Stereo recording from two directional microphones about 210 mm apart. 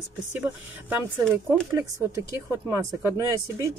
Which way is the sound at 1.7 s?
15° right (ahead or behind).